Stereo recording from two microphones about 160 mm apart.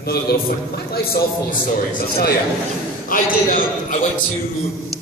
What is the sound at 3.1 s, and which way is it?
Speech, 60° left (ahead or behind).